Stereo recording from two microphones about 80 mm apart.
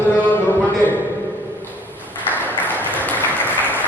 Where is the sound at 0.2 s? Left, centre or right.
Left.